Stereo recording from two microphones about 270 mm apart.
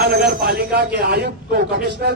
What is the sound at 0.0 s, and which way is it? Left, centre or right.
A man's voice, right.